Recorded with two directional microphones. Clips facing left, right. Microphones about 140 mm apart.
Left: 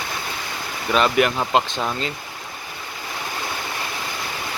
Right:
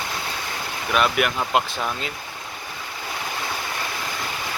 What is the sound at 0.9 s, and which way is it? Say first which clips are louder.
Speech: left 3 dB; 5° right (ahead or behind).